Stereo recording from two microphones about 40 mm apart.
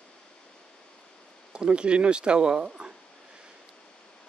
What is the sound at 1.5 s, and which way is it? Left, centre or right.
Speech, right.